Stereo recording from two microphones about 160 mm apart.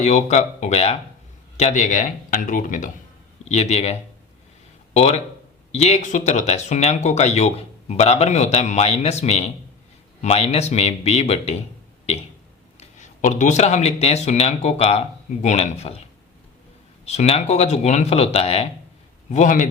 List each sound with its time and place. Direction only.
0.0 s speech: 45° left (ahead or behind)
3.5 s speech: 40° left (ahead or behind)
4.9 s speech: 40° left (ahead or behind)
12.8 s speech: 50° left (ahead or behind)
17.1 s speech: 40° left (ahead or behind)
19.3 s speech: 50° left (ahead or behind)